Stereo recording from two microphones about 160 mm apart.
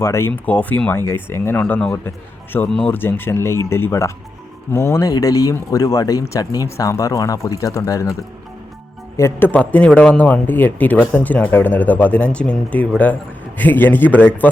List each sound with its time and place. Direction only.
0.0 s a man's voice: 15° left (ahead or behind)